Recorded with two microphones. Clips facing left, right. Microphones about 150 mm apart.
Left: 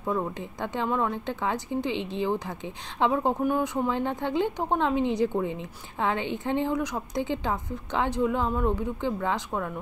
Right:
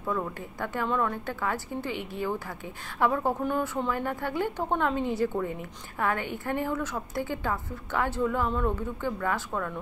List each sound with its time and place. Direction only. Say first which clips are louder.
0.0 s speech: left 2 dB; 20° left (ahead or behind)